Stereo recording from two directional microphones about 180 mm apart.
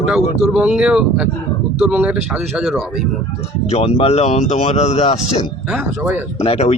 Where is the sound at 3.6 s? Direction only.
35° left (ahead or behind).